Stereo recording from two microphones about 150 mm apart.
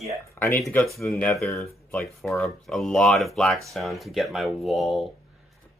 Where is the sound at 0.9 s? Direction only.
Centre (ahead or behind).